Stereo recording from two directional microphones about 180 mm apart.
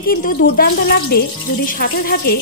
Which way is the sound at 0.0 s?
50° left (ahead or behind).